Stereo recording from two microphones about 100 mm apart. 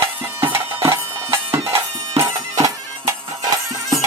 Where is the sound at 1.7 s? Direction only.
30° right (ahead or behind).